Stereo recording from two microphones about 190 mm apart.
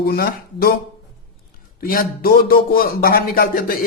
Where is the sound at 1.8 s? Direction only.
50° left (ahead or behind).